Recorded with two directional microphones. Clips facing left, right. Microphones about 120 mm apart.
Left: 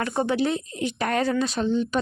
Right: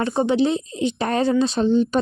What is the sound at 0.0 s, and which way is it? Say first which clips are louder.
Speech: right 5 dB; 20° right (ahead or behind).